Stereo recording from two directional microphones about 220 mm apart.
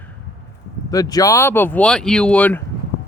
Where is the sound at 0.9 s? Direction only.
15° left (ahead or behind).